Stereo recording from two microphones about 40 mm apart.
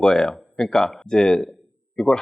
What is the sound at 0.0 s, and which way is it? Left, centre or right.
Speech, centre.